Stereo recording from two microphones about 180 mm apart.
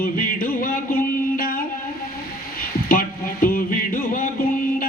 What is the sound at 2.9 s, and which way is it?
Music, 50° left (ahead or behind).